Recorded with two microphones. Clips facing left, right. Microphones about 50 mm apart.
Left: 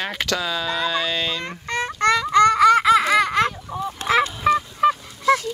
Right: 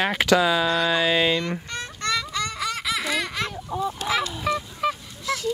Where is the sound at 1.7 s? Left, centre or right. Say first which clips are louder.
Left 13 dB; left.